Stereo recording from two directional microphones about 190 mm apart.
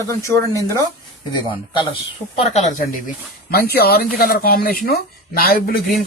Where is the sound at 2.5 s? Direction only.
45° left (ahead or behind).